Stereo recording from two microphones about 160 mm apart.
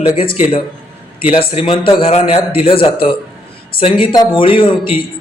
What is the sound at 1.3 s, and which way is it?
Speech, 35° left (ahead or behind).